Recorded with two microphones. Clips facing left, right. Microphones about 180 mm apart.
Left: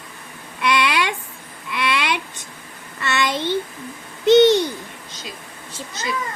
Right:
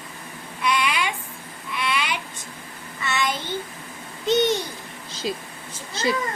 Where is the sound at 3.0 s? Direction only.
80° left.